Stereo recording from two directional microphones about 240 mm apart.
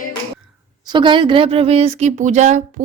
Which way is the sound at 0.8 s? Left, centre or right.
Centre.